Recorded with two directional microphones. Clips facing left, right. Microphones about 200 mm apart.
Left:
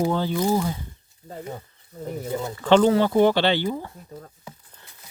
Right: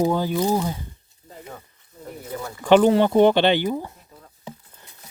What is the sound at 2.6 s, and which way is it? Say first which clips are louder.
Speech: right 2 dB; 15° right (ahead or behind).